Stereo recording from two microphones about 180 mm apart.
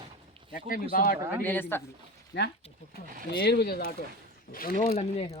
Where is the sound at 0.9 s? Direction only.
50° left (ahead or behind).